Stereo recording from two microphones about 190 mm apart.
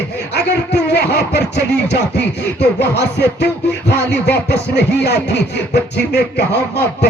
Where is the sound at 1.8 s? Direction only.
60° left (ahead or behind).